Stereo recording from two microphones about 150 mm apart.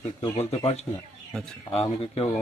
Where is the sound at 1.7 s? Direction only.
40° left (ahead or behind).